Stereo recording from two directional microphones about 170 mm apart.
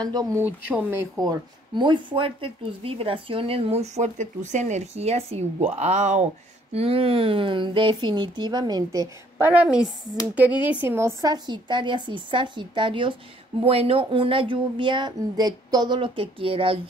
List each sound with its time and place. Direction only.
0.0 s speech: 20° right (ahead or behind)
1.2 s a woman's voice: 25° right (ahead or behind)
9.5 s a woman's voice: 5° right (ahead or behind); by 16.8 s 30° right (ahead or behind)